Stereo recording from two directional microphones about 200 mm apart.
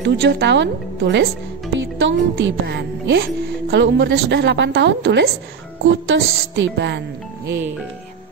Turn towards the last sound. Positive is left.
turn(degrees=-10)  # may be behind; listen again after turning